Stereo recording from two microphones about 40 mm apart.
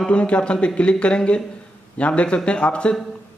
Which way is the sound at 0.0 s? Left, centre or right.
Left.